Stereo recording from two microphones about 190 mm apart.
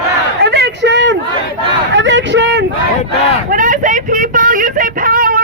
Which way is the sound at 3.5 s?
45° right (ahead or behind).